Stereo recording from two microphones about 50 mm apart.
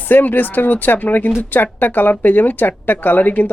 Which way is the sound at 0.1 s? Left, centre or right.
Left.